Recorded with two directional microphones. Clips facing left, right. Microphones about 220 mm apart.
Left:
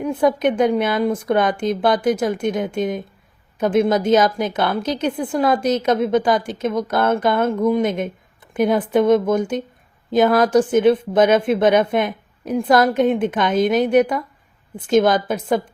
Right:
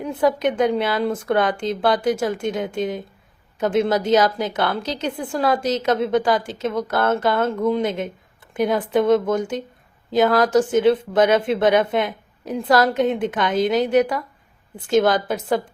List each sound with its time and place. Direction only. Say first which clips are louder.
0.0 s a woman's voice: left 2 dB; 20° left (ahead or behind)